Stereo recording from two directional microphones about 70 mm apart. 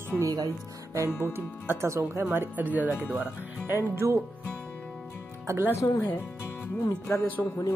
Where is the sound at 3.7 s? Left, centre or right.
Right.